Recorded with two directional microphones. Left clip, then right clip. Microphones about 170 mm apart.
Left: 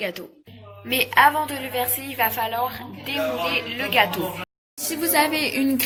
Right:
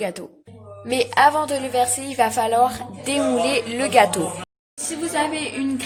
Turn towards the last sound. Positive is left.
turn(degrees=35)  # may be behind; listen again after turning